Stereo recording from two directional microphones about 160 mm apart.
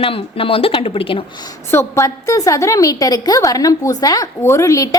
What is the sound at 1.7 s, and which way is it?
A woman's voice, 20° left (ahead or behind).